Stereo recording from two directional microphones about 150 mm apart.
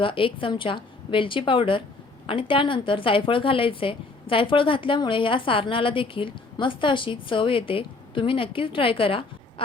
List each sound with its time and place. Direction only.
0.0 s a woman's voice: 35° left (ahead or behind)